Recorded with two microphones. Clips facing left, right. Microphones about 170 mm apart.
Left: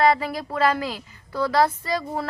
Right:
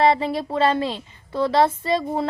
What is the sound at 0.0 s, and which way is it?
A woman's voice, 25° right (ahead or behind).